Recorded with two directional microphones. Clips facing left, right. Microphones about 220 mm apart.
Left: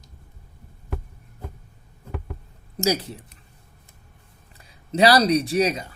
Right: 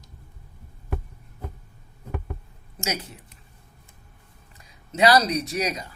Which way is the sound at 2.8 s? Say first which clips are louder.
Left 8 dB; 35° left (ahead or behind).